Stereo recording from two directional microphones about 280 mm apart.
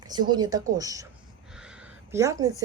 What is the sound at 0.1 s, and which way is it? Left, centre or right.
Speech, centre.